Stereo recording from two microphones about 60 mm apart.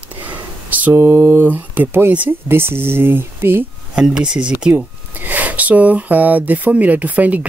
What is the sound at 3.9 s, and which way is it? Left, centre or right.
Speech, centre.